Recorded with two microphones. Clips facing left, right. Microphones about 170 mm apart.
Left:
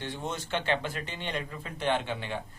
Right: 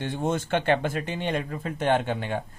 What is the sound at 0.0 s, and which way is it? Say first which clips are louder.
Speech: right 8 dB; 50° right (ahead or behind).